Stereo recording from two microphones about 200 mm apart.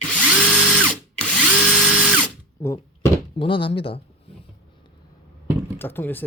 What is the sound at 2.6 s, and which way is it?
Door, 15° left (ahead or behind).